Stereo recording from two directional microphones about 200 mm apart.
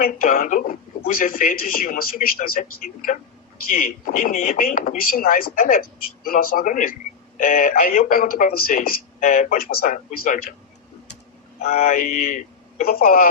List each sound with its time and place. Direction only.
0.0 s a man's voice: 45° left (ahead or behind)
11.6 s a man's voice: 45° left (ahead or behind)